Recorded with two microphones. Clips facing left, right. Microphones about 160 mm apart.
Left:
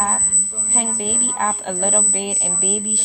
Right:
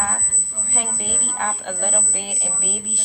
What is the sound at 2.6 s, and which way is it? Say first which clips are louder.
Speech: left 8 dB; 90° left.